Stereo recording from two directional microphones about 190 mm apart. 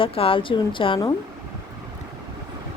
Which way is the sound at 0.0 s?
30° left (ahead or behind).